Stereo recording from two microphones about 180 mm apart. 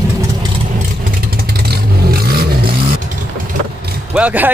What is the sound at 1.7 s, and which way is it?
Vehicle, 60° right (ahead or behind).